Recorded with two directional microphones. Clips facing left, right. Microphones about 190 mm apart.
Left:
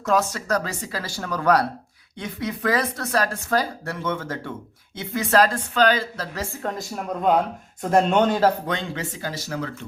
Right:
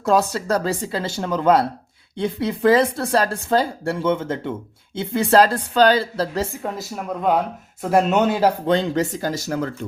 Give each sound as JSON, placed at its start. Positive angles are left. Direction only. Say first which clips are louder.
{"t": 0.0, "sound": "speech", "louder": "right 4 dB", "side_deg": -35}
{"t": 6.5, "sound": "speech", "louder": "right 1 dB", "side_deg": -10}
{"t": 8.6, "sound": "speech", "louder": "right 9 dB", "side_deg": -35}